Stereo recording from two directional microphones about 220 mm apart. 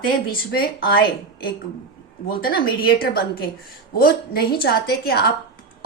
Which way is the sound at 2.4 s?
45° left (ahead or behind).